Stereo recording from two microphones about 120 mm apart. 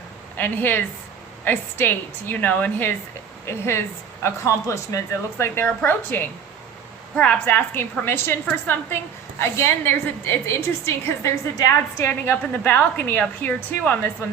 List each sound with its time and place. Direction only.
0.3 s a woman's voice: 15° left (ahead or behind)
12.0 s a woman's voice: 15° left (ahead or behind)